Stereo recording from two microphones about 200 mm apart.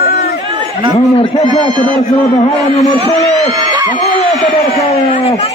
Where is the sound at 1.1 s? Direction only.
30° left (ahead or behind).